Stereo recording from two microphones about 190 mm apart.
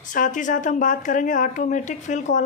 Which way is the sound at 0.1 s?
40° left (ahead or behind).